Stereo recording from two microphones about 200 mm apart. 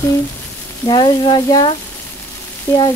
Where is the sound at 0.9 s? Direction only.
20° left (ahead or behind).